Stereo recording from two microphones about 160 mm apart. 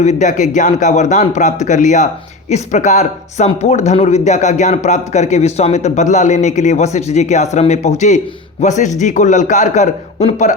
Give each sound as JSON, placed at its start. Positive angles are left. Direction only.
{"t": 0.0, "sound": "speech", "side_deg": 50}